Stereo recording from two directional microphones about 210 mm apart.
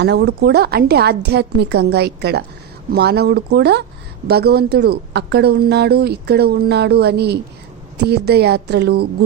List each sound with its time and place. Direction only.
0.0 s a woman's voice: 55° right (ahead or behind)